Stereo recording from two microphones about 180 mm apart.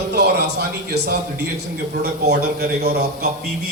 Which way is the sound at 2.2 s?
65° right (ahead or behind).